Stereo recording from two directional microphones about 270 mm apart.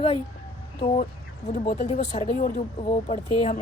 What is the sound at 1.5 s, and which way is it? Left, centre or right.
Speech, left.